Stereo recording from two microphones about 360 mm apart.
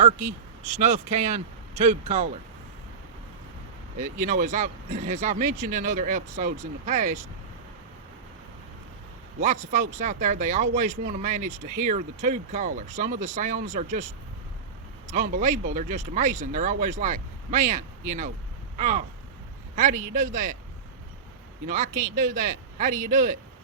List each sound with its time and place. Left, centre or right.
0.6 s speech: centre
3.9 s speech: right
9.4 s a man's voice: centre
21.9 s speech: right
22.2 s speech: right